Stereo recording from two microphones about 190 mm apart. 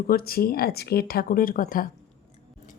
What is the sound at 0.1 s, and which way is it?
Speech, 55° left (ahead or behind).